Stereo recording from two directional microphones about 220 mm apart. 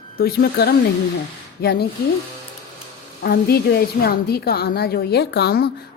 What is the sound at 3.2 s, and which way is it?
A woman's voice, 45° left (ahead or behind).